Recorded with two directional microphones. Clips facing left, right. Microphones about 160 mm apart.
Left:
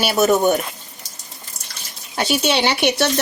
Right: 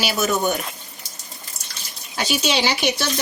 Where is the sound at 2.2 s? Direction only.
55° left (ahead or behind).